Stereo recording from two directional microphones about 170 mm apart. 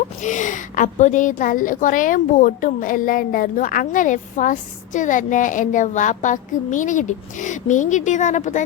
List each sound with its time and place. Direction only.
0.2 s a woman's voice: 45° left (ahead or behind)